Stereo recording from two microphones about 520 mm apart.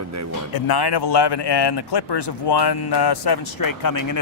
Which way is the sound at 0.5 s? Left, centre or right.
Left.